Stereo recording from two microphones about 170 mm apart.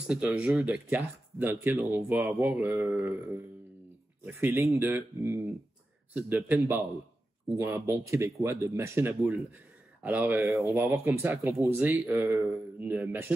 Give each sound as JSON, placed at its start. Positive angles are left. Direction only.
{"t": 0.0, "sound": "speech", "side_deg": -5}